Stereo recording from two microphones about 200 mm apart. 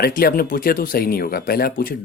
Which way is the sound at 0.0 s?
50° left (ahead or behind).